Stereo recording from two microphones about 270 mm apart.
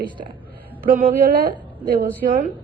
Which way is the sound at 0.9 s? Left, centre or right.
Right.